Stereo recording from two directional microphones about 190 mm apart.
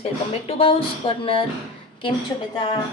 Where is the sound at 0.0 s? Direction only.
30° left (ahead or behind).